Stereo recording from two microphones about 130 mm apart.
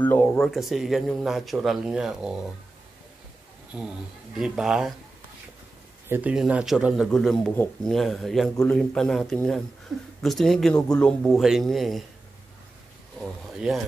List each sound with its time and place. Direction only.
0.0 s speech: 10° left (ahead or behind)
3.7 s speech: 5° right (ahead or behind)
6.0 s speech: 15° right (ahead or behind)
6.3 s speech: 5° right (ahead or behind)